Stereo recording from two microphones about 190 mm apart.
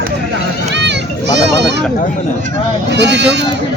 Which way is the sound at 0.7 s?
65° right (ahead or behind).